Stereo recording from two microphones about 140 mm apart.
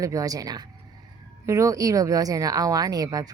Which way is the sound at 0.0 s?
25° right (ahead or behind).